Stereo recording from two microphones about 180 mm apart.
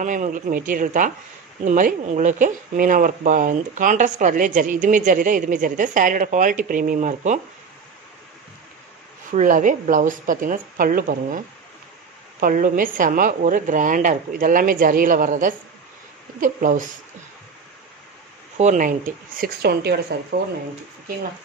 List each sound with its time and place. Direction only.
0.0 s speech: 45° right (ahead or behind)
9.3 s speech: 45° right (ahead or behind)
18.6 s speech: 45° right (ahead or behind)
19.6 s speech: 65° right (ahead or behind)